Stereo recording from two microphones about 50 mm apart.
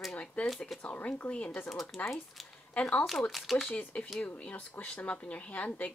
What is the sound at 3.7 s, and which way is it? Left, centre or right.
Speech, left.